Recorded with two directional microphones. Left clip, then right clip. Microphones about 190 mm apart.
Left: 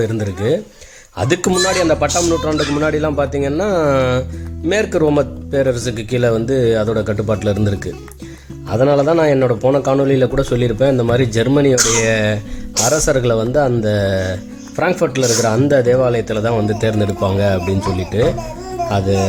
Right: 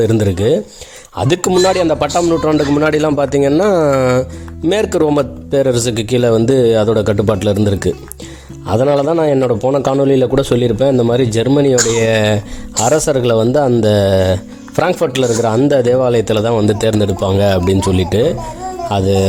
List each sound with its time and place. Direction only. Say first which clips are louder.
0.0 s speech: right 6 dB; 35° right (ahead or behind)